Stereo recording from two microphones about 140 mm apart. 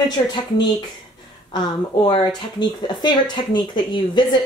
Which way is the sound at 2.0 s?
35° left (ahead or behind).